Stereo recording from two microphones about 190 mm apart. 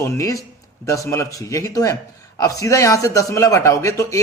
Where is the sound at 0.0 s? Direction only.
15° left (ahead or behind).